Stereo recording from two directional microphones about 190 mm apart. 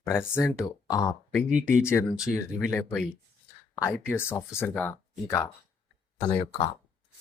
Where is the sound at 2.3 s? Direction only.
15° left (ahead or behind).